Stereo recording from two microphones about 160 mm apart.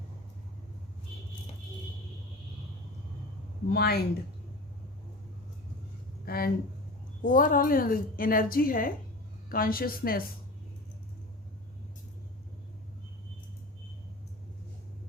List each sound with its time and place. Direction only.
3.7 s a woman's voice: 80° left
6.2 s speech: 70° left (ahead or behind)
7.2 s a woman's voice: 55° left (ahead or behind)